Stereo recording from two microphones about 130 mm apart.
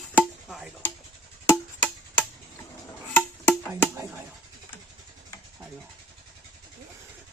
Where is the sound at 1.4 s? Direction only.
15° left (ahead or behind).